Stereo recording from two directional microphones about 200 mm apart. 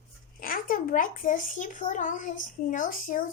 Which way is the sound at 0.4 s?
45° left (ahead or behind).